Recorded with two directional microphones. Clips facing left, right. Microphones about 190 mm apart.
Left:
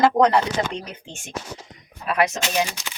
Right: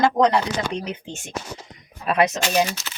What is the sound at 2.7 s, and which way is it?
Speech, 15° left (ahead or behind).